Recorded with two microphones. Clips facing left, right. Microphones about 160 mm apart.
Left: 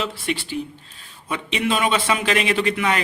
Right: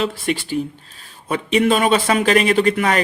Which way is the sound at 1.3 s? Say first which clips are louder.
Right 7 dB; 45° right (ahead or behind).